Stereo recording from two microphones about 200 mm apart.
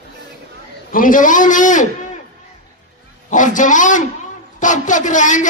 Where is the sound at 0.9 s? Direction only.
40° left (ahead or behind).